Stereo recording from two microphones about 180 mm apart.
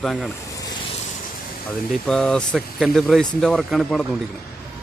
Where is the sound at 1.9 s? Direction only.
5° left (ahead or behind).